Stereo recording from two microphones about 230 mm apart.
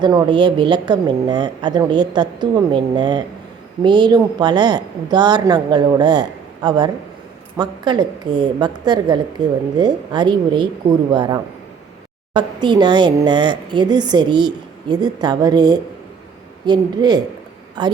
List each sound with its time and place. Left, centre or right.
0.0 s speech: centre